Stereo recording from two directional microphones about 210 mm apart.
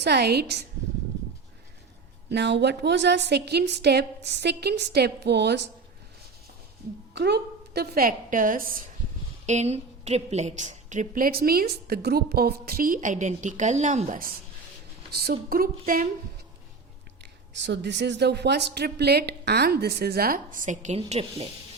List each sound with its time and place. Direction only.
0.0 s a woman's voice: 50° right (ahead or behind)
2.3 s a woman's voice: 55° right (ahead or behind)
7.1 s a woman's voice: 55° right (ahead or behind)
9.5 s a woman's voice: 35° right (ahead or behind)
17.5 s a woman's voice: 55° right (ahead or behind); by 21.4 s 30° right (ahead or behind)